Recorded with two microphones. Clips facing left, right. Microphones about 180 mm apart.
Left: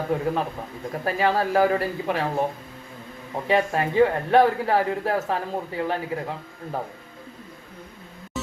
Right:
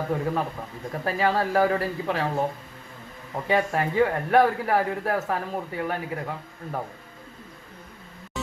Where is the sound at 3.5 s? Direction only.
25° left (ahead or behind).